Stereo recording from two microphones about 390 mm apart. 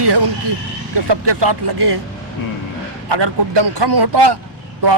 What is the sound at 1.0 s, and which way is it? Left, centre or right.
Speech, right.